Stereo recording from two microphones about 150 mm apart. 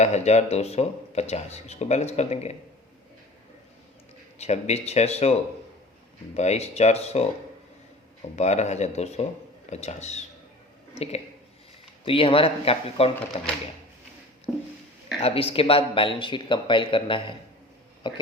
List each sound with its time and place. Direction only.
0.0 s speech: 45° left (ahead or behind)
4.4 s speech: 45° left (ahead or behind)
6.3 s speech: 45° left (ahead or behind)
8.4 s speech: 50° left (ahead or behind)
15.2 s speech: 40° left (ahead or behind)